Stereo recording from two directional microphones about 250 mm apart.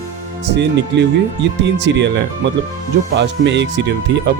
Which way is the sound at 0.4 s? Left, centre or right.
Right.